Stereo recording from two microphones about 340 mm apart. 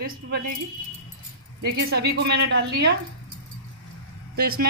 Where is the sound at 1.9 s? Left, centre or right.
Right.